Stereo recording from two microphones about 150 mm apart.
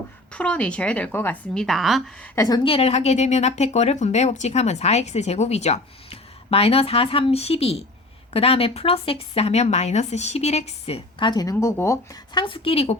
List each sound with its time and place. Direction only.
0.3 s speech: 10° left (ahead or behind)
1.5 s a woman's voice: centre (ahead or behind)
2.2 s a woman's voice: 20° left (ahead or behind)
2.6 s speech: 40° left (ahead or behind); by 11.9 s 20° left (ahead or behind)
12.3 s a woman's voice: 35° left (ahead or behind)